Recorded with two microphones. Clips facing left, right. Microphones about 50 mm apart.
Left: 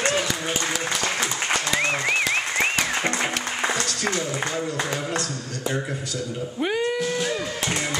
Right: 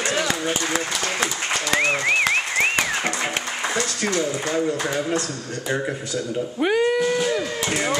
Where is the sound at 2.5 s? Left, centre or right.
Centre.